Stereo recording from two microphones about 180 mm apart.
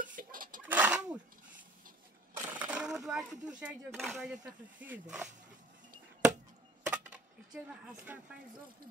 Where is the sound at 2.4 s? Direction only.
10° right (ahead or behind).